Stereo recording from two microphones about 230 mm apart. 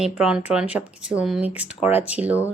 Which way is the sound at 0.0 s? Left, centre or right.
Centre.